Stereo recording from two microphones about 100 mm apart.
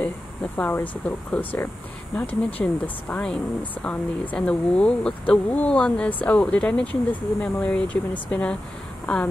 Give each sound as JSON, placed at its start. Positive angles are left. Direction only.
{"t": 0.6, "sound": "speech", "side_deg": 15}